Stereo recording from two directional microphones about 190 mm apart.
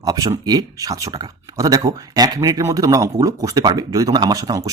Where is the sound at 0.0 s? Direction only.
20° right (ahead or behind).